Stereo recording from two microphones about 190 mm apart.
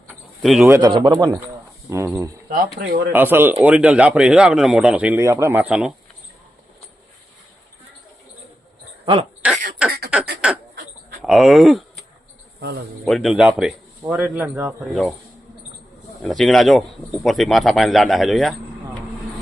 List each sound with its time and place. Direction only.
0.1 s a sound: centre (ahead or behind)
0.7 s a man's voice: 15° right (ahead or behind)
2.7 s speech: 50° right (ahead or behind)
3.1 s speech: 10° right (ahead or behind)
9.4 s speech: 5° right (ahead or behind)
13.1 s speech: centre (ahead or behind)
16.2 s speech: centre (ahead or behind)